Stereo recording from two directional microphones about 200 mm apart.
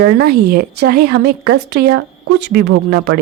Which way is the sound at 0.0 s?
55° right (ahead or behind).